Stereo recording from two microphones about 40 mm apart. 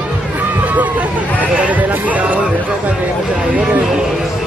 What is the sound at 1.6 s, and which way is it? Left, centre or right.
Music, right.